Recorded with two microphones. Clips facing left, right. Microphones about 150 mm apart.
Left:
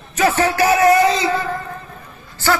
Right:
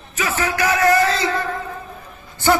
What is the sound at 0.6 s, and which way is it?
Speech, 25° left (ahead or behind).